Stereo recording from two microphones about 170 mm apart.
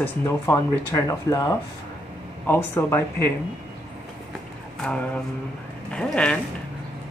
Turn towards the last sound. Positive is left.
turn(degrees=5)  # may be behind; listen again after turning